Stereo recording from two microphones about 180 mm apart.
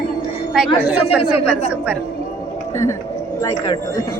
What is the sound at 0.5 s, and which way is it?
Speech, 5° right (ahead or behind).